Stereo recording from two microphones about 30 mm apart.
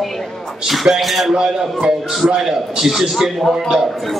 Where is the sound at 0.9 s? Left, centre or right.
Centre.